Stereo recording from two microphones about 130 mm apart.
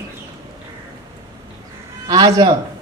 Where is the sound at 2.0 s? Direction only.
30° right (ahead or behind).